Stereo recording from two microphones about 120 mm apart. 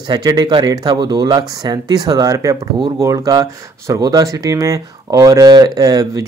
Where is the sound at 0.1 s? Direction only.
35° right (ahead or behind).